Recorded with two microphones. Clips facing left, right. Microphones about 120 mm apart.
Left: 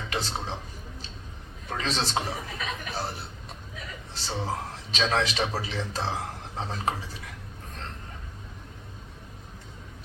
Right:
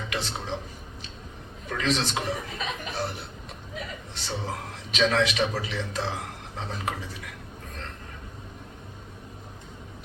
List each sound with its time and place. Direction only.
0.1 s speech: 35° left (ahead or behind)
1.7 s a man's voice: 35° left (ahead or behind)